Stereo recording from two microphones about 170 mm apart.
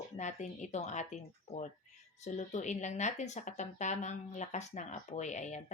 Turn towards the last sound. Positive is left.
turn(degrees=45)  # may be behind; listen again after turning